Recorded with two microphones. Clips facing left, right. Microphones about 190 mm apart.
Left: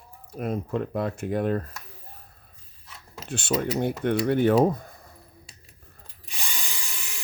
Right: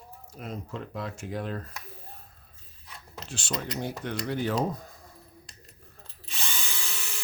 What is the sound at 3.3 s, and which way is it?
Speech, 60° left (ahead or behind).